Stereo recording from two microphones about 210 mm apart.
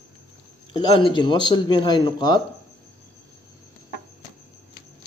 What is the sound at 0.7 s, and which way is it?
Speech, 25° left (ahead or behind).